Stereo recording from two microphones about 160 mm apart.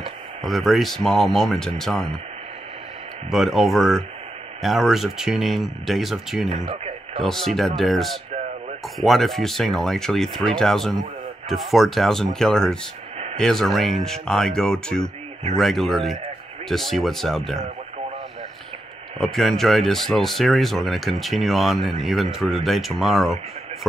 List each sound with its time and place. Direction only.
0.4 s speech: centre (ahead or behind)
3.3 s speech: centre (ahead or behind)
6.5 s speech: 40° right (ahead or behind)
7.2 s speech: centre (ahead or behind)
19.1 s speech: centre (ahead or behind)